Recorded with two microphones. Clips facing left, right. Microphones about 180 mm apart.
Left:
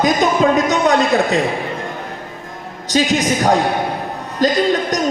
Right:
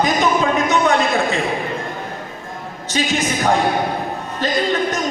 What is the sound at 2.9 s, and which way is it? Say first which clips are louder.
Speech: left 5 dB; 35° left (ahead or behind).